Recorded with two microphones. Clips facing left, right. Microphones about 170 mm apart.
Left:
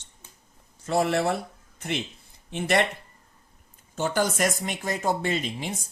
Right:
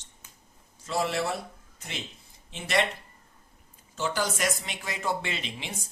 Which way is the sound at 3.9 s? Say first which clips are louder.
Left 5 dB; 50° left (ahead or behind).